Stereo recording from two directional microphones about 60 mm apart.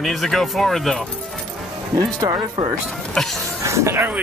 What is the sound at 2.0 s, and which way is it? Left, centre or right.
Speech, right.